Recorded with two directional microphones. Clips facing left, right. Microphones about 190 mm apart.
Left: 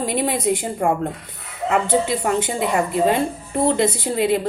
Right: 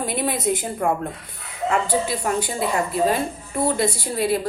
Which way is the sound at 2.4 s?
15° left (ahead or behind).